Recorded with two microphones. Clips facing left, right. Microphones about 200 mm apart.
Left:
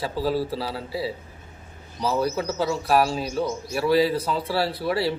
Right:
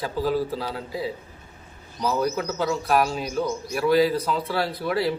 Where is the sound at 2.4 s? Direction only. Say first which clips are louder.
Left 1 dB; 5° left (ahead or behind).